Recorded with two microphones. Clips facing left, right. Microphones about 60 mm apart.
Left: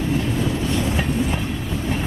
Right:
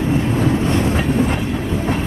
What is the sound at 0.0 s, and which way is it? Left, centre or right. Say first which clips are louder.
Train: right 5 dB; right.